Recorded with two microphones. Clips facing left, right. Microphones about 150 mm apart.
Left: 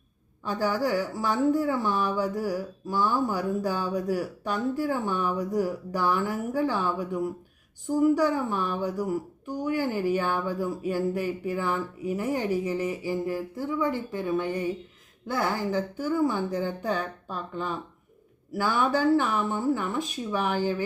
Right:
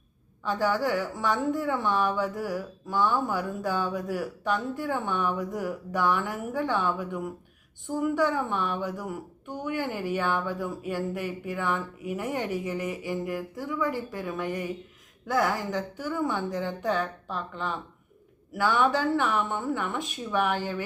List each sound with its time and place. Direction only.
0.6 s speech: 35° left (ahead or behind)